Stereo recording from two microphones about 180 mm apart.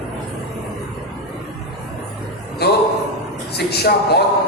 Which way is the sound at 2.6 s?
65° left (ahead or behind).